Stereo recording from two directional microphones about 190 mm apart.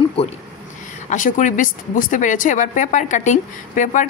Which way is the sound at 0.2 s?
30° left (ahead or behind).